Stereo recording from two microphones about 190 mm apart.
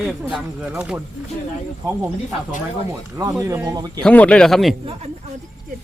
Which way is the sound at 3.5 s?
15° right (ahead or behind).